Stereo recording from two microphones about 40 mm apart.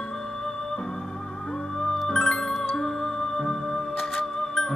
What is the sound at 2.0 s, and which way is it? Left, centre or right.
Music, centre.